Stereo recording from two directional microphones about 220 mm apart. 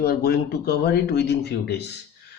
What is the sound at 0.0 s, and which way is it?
Speech, 45° left (ahead or behind).